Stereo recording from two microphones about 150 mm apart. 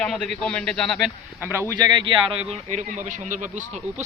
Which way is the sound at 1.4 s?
15° right (ahead or behind).